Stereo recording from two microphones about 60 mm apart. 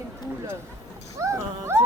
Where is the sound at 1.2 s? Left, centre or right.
Right.